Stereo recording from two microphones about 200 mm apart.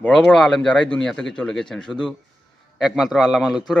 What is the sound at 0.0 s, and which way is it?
Speech, 5° left (ahead or behind).